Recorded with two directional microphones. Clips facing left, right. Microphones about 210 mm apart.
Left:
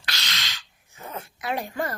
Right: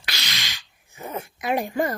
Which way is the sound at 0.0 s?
10° right (ahead or behind).